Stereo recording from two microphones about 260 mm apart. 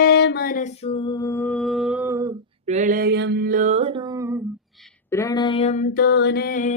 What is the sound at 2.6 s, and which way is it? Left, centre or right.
Mantra, right.